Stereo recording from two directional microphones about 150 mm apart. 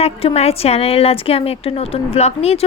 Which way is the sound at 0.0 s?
40° left (ahead or behind).